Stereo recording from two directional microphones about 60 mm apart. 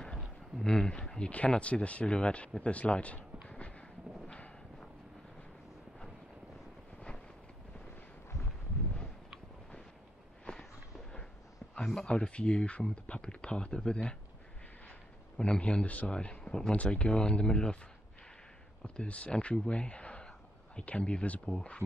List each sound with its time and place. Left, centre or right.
0.7 s speech: centre
3.4 s a sound: centre
10.6 s a sound: centre
11.7 s speech: centre
15.3 s speech: centre
18.9 s speech: left